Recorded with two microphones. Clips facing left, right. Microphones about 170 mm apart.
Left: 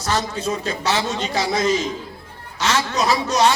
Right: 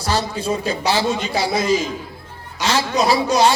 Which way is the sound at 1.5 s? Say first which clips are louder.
Right 1 dB; 10° right (ahead or behind).